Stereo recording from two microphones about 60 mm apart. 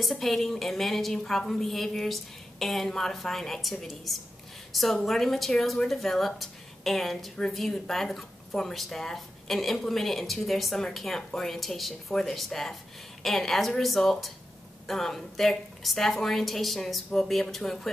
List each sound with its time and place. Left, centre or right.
0.0 s speech: centre